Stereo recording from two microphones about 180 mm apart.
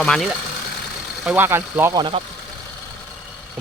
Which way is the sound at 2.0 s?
25° right (ahead or behind).